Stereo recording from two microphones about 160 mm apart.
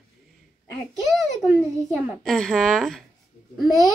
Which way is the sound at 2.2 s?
Centre (ahead or behind).